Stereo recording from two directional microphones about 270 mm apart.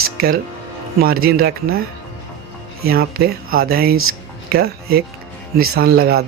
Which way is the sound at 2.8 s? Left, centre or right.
Right.